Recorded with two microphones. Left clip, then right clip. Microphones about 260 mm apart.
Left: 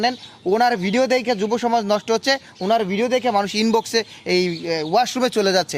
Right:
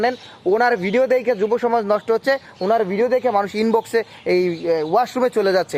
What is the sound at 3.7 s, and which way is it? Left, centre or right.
Speech, left.